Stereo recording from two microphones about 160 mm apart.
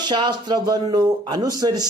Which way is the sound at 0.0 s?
30° right (ahead or behind).